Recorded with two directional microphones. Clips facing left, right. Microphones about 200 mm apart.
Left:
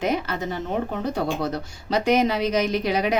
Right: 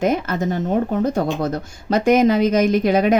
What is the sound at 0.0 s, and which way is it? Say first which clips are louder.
Speech: right 5 dB; 50° right (ahead or behind).